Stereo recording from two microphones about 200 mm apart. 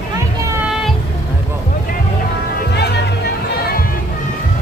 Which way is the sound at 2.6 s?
55° left (ahead or behind).